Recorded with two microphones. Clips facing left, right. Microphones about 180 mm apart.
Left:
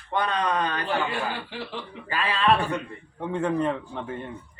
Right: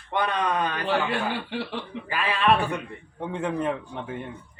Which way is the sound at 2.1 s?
15° right (ahead or behind).